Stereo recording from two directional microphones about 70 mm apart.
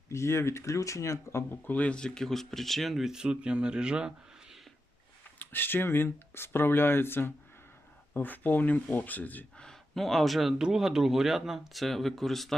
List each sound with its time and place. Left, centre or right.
0.1 s speech: left
1.6 s speech: left; by 4.6 s centre
5.4 s speech: left
9.6 s speech: centre